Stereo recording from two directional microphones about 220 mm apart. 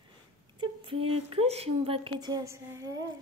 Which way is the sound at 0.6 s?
20° right (ahead or behind).